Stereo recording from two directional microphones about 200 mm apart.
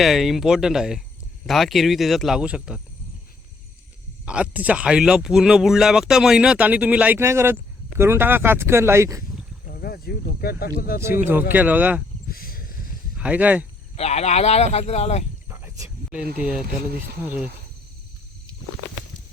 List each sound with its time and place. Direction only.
0.0 s speech: centre (ahead or behind)
4.3 s speech: 5° right (ahead or behind)
9.6 s speech: 45° left (ahead or behind)
11.3 s speech: 10° right (ahead or behind)
12.3 s a sound: 45° left (ahead or behind)
13.1 s speech: 5° right (ahead or behind)
13.9 s speech: 30° left (ahead or behind)
15.4 s cricket: 15° right (ahead or behind)
16.4 s speech: 5° right (ahead or behind)